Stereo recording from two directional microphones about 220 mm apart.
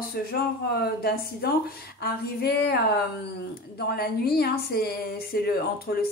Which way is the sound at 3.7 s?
45° left (ahead or behind).